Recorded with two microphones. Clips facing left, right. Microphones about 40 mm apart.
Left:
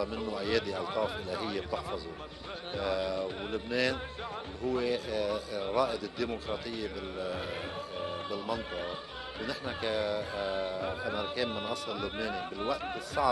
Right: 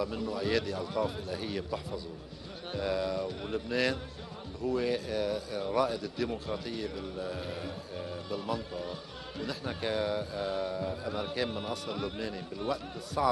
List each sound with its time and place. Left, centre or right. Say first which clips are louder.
0.3 s speech: even; centre
0.7 s a man's voice: even; centre
1.3 s speech: left 1 dB; centre
9.7 s speech: even; centre
10.4 s music: even; left
11.7 s speech: even; centre